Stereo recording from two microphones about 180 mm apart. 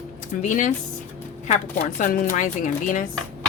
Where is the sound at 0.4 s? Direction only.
45° left (ahead or behind).